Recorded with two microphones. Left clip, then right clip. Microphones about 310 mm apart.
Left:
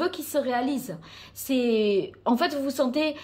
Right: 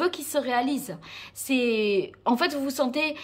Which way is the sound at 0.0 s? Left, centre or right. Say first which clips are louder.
Even; centre.